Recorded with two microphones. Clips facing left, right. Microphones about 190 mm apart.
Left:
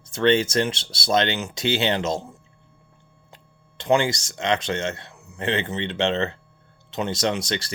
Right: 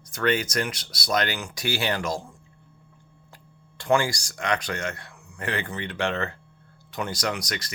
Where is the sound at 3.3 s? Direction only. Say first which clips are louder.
Left 3 dB; 20° left (ahead or behind).